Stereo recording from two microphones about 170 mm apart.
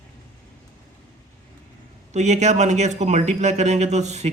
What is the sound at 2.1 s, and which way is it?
A man's voice, 45° right (ahead or behind).